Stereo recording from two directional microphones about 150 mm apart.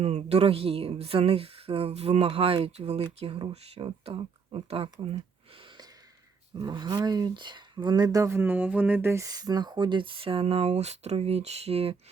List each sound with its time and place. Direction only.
0.0 s speech: 45° right (ahead or behind)
6.6 s speech: 30° right (ahead or behind)